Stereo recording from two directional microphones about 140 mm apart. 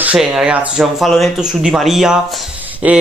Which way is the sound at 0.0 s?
10° right (ahead or behind).